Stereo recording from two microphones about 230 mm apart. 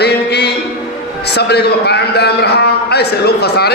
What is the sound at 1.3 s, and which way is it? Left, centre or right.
A man's voice, left.